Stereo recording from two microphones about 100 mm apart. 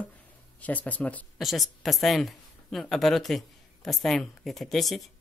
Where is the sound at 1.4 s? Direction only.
Centre (ahead or behind).